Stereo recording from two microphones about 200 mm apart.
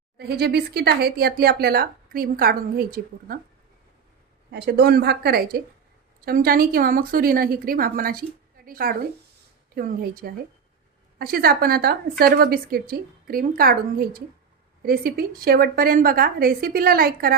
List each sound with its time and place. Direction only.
0.2 s speech: 50° right (ahead or behind)
4.5 s a woman's voice: 55° right (ahead or behind)